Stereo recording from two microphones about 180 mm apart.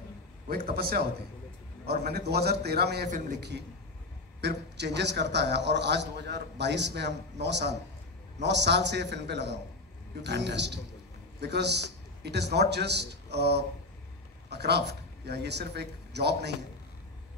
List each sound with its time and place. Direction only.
0.5 s a man's voice: 55° right (ahead or behind)
4.4 s a man's voice: 70° right (ahead or behind)